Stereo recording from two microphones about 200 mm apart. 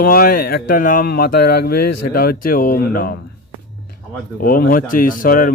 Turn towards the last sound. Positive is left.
turn(degrees=45)  # may be behind; listen again after turning